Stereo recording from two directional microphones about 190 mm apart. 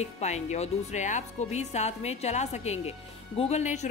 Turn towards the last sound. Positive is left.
turn(degrees=35)  # may be behind; listen again after turning